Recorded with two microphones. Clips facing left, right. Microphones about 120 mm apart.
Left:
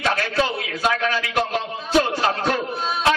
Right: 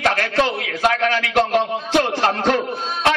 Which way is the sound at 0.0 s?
60° right (ahead or behind).